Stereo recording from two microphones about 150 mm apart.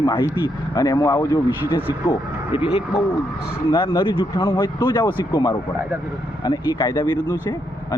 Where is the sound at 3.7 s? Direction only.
35° left (ahead or behind).